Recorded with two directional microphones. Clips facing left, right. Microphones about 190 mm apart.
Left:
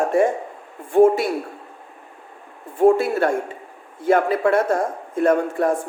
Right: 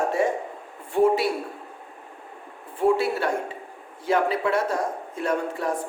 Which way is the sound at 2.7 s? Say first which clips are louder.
Left 6 dB; 45° left (ahead or behind).